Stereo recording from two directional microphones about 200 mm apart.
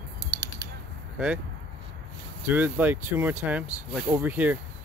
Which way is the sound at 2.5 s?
10° right (ahead or behind).